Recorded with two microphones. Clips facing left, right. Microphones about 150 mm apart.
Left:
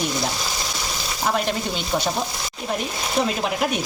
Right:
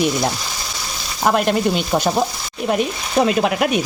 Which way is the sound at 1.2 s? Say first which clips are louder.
Right 6 dB; 65° right (ahead or behind).